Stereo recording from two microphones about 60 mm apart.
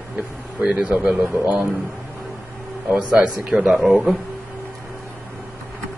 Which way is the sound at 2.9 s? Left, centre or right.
Centre.